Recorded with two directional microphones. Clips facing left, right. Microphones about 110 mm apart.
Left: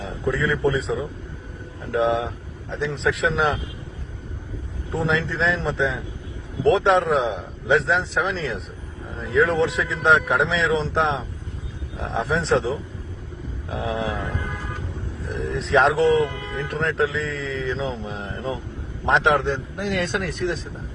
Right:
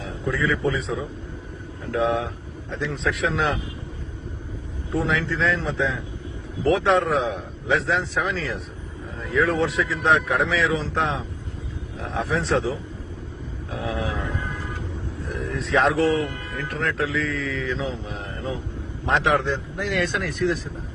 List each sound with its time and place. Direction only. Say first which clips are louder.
0.3 s speech: left 1 dB; 20° left (ahead or behind)
4.9 s speech: even; 25° left (ahead or behind)
13.7 s speech: left 2 dB; 20° left (ahead or behind)
15.3 s speech: left 3 dB; 20° left (ahead or behind)